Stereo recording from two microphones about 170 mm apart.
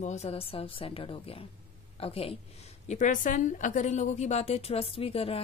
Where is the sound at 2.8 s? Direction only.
45° left (ahead or behind).